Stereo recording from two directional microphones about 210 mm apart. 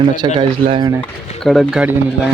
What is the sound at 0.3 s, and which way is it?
Speech, 25° right (ahead or behind).